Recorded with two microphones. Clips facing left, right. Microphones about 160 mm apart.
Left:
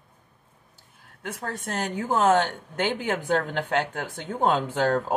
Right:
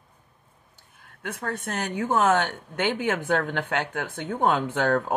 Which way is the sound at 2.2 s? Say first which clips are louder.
Left 4 dB; 35° left (ahead or behind).